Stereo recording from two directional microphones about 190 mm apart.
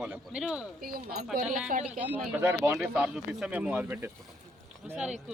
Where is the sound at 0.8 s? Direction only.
50° right (ahead or behind).